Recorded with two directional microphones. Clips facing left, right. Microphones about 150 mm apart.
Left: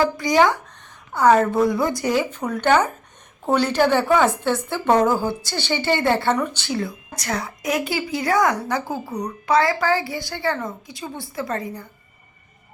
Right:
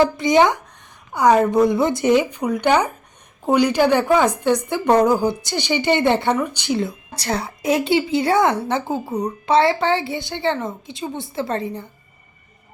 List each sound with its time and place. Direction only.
0.0 s a woman's voice: 20° right (ahead or behind)